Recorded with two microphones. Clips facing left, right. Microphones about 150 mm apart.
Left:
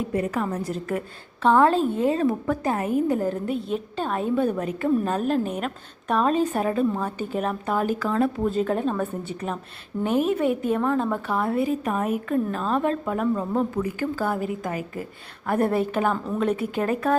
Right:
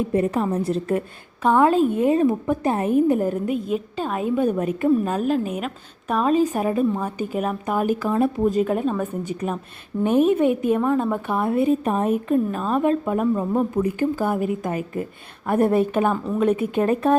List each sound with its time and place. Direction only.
0.1 s a woman's voice: 25° right (ahead or behind)
1.4 s a woman's voice: 10° right (ahead or behind)
5.0 s a woman's voice: 5° right (ahead or behind)
9.4 s speech: 30° left (ahead or behind)
10.0 s a woman's voice: 20° right (ahead or behind)
11.3 s a woman's voice: 20° right (ahead or behind)
12.5 s a woman's voice: 10° right (ahead or behind); by 17.2 s 25° right (ahead or behind)